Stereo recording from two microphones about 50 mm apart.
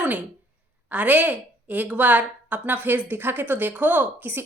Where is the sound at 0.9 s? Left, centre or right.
Right.